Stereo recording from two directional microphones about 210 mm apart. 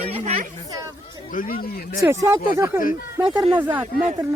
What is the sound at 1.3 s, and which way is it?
Speech, 40° left (ahead or behind).